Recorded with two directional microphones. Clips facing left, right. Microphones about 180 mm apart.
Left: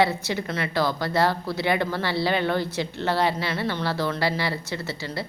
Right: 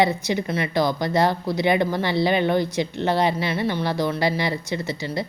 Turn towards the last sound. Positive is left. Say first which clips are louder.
# right 4 dB
turn(degrees=-15)  # may be behind; listen again after turning